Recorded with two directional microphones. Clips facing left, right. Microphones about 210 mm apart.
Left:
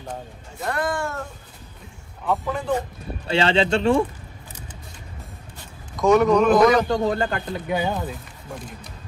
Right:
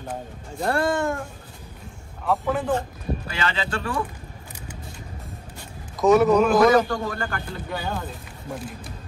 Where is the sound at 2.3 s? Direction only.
5° right (ahead or behind).